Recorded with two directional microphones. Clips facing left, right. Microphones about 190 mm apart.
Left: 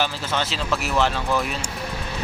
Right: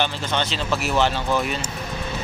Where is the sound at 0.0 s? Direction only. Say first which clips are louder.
Right 1 dB; 5° left (ahead or behind).